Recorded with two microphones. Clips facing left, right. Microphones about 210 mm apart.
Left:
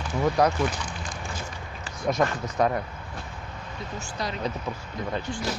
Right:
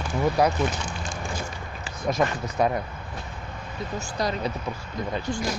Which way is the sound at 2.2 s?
10° right (ahead or behind).